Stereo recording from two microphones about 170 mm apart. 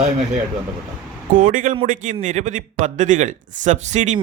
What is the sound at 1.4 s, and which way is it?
A man's voice, 50° right (ahead or behind).